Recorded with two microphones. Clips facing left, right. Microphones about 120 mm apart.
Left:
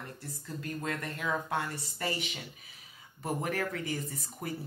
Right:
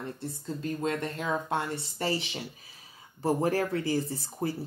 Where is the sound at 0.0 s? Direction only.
25° right (ahead or behind).